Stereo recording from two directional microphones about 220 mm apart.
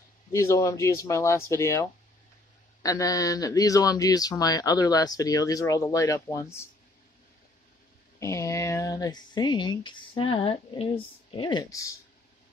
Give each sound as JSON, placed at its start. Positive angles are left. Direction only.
{"t": 0.3, "sound": "speech", "side_deg": 15}
{"t": 8.2, "sound": "speech", "side_deg": 15}